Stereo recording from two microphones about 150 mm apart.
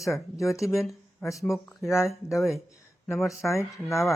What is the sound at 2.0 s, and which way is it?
Speech, 20° left (ahead or behind).